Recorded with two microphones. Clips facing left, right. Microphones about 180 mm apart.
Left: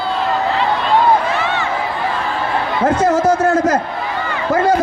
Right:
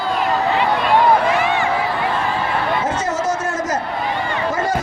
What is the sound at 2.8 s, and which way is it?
A man's voice, 60° left (ahead or behind).